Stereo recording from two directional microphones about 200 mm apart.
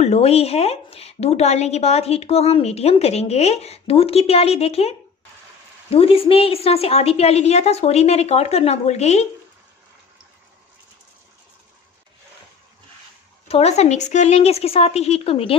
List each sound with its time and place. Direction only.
0.0 s a woman's voice: 30° left (ahead or behind)
13.5 s a woman's voice: 30° left (ahead or behind)